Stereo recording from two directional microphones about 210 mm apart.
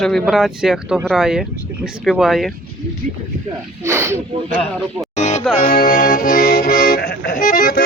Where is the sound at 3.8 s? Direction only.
15° right (ahead or behind).